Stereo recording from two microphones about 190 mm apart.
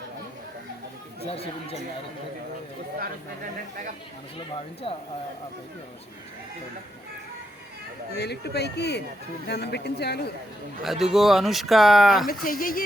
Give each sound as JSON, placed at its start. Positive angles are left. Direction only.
{"t": 1.2, "sound": "speech", "side_deg": 30}
{"t": 4.4, "sound": "speech", "side_deg": 30}
{"t": 8.1, "sound": "speech", "side_deg": 60}
{"t": 10.8, "sound": "speech", "side_deg": 0}
{"t": 12.3, "sound": "speech", "side_deg": 50}